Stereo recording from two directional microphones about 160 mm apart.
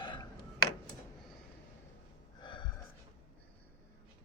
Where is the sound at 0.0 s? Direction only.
30° left (ahead or behind).